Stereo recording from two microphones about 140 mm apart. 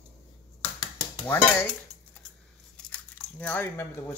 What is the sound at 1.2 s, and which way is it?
Speech, 15° left (ahead or behind).